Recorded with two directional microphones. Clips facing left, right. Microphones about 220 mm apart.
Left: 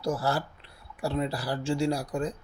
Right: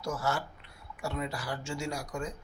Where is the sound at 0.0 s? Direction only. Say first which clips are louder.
Left 5 dB; 35° left (ahead or behind).